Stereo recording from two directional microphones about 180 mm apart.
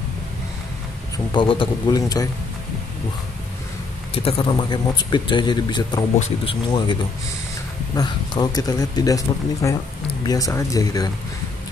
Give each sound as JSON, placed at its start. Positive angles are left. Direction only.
{"t": 1.1, "sound": "a man's voice", "side_deg": 25}
{"t": 4.1, "sound": "a man's voice", "side_deg": 30}
{"t": 6.1, "sound": "speech", "side_deg": 40}
{"t": 7.9, "sound": "a man's voice", "side_deg": 20}